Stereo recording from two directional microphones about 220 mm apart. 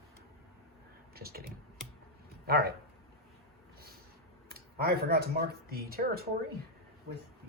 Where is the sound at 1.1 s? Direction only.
45° right (ahead or behind).